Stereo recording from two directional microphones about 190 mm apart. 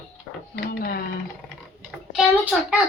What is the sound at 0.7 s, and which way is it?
Sewing machine, 50° left (ahead or behind).